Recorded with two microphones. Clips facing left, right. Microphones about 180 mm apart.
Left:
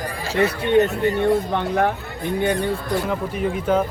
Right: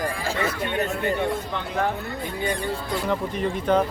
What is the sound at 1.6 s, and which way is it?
Speech, 55° left (ahead or behind).